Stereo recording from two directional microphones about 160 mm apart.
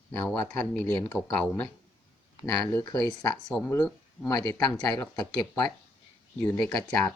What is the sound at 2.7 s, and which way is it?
Speech, 20° left (ahead or behind).